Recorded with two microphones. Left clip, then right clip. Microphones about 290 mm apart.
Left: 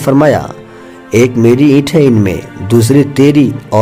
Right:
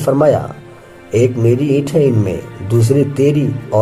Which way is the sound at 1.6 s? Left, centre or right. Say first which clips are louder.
Left 5 dB; left.